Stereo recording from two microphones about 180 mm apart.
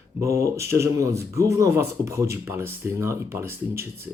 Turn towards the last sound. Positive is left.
turn(degrees=-15)  # may be behind; listen again after turning